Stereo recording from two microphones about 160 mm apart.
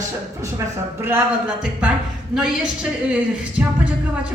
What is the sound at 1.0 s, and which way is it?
A woman's voice, 10° right (ahead or behind).